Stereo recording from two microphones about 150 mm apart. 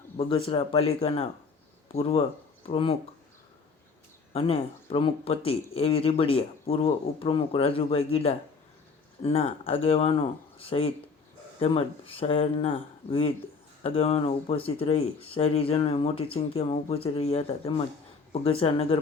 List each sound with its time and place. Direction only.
0.2 s speech: 40° left (ahead or behind)
4.3 s speech: 40° left (ahead or behind)